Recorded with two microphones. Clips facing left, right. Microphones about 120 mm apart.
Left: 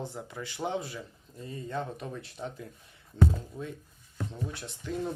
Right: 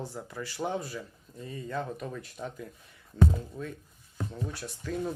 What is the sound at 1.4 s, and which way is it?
Speech, 30° left (ahead or behind).